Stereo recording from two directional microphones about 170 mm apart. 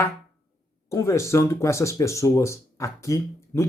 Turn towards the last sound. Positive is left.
turn(degrees=15)  # may be behind; listen again after turning